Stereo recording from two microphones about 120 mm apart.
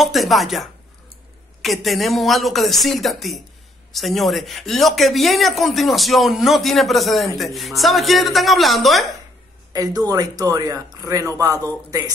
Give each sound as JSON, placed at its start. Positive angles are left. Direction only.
{"t": 0.0, "sound": "speech", "side_deg": 0}
{"t": 9.7, "sound": "speech", "side_deg": -30}